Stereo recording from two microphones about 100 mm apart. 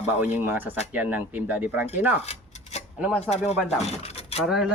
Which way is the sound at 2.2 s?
90° left.